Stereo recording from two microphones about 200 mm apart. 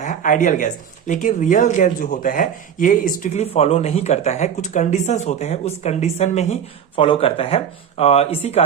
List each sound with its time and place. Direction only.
0.0 s speech: 40° left (ahead or behind)